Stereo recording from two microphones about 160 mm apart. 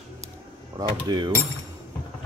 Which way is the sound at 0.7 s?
35° right (ahead or behind).